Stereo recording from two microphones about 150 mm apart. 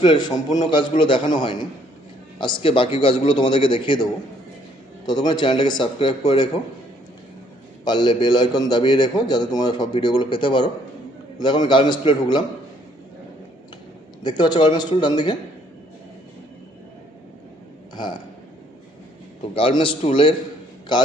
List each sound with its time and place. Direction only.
0.0 s a man's voice: 30° left (ahead or behind)
7.9 s a man's voice: 30° left (ahead or behind)
14.3 s a man's voice: 30° left (ahead or behind)
17.9 s speech: 30° left (ahead or behind)
19.5 s a man's voice: 35° left (ahead or behind)